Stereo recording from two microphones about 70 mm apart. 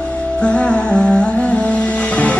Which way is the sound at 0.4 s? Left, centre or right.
Centre.